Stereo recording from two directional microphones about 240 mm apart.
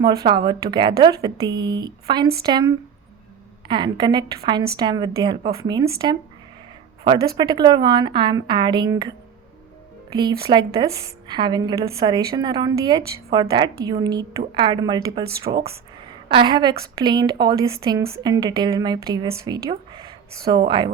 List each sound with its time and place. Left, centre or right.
0.3 s a woman's voice: centre
7.3 s a woman's voice: centre
15.5 s a woman's voice: right